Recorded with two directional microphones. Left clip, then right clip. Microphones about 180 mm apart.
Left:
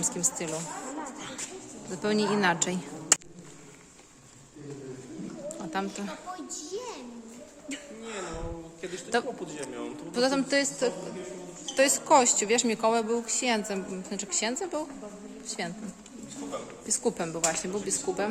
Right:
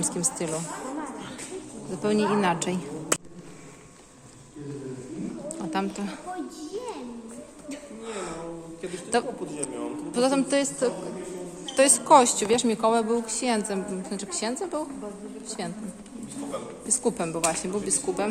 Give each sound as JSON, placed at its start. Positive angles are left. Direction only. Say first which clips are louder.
{"t": 0.0, "sound": "speech", "louder": "right 2 dB", "side_deg": 0}
{"t": 1.9, "sound": "a woman's voice", "louder": "right 3 dB", "side_deg": 15}
{"t": 5.5, "sound": "speech", "louder": "right 4 dB", "side_deg": 0}
{"t": 8.0, "sound": "music", "louder": "right 4 dB", "side_deg": 5}
{"t": 9.1, "sound": "a woman's voice", "louder": "right 3 dB", "side_deg": 10}
{"t": 16.8, "sound": "a woman's voice", "louder": "right 2 dB", "side_deg": 15}